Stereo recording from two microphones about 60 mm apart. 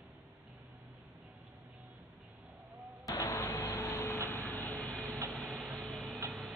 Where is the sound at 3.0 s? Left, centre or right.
Left.